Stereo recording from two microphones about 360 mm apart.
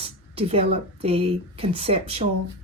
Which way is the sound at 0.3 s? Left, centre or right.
Centre.